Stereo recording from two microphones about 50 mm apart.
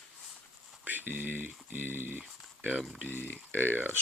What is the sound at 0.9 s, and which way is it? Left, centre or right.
Speech, right.